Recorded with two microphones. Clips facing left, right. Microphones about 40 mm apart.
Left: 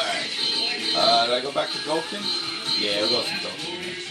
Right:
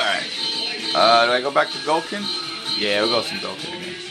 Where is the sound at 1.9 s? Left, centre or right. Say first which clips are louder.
Right 4 dB; right.